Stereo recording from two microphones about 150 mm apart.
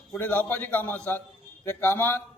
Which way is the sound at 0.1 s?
10° left (ahead or behind).